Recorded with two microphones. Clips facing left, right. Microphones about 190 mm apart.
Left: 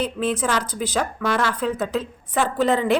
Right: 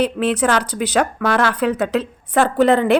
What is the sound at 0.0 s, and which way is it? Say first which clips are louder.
A woman's voice: right 5 dB; 70° right (ahead or behind).